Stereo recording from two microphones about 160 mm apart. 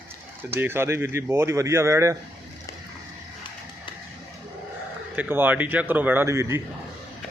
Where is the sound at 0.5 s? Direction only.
15° right (ahead or behind).